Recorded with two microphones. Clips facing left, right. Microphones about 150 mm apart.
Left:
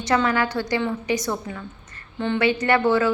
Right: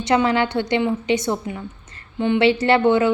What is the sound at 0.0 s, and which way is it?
A woman's voice, 20° right (ahead or behind).